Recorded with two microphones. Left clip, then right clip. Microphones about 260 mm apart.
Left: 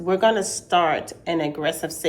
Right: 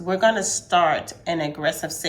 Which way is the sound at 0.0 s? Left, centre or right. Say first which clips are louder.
Even; right.